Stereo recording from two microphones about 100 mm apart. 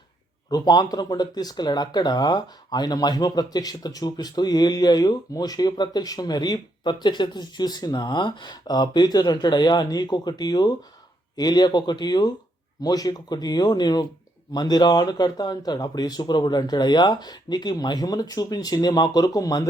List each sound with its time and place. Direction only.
0.5 s speech: 45° left (ahead or behind)